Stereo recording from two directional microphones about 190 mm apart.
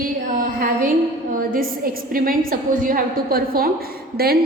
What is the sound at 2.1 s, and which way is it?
A woman's voice, 50° right (ahead or behind).